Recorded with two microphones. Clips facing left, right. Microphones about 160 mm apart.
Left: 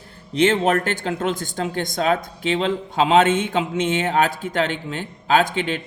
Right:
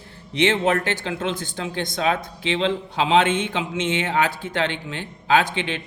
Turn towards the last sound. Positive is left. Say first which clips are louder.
# left 2 dB
turn(degrees=40)  # may be behind; listen again after turning